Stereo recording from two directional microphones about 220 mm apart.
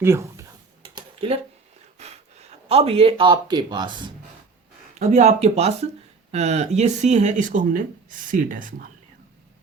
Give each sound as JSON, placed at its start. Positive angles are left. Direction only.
{"t": 0.0, "sound": "speech", "side_deg": -10}
{"t": 0.9, "sound": "a sound", "side_deg": -25}
{"t": 2.0, "sound": "speech", "side_deg": -30}
{"t": 4.9, "sound": "speech", "side_deg": -30}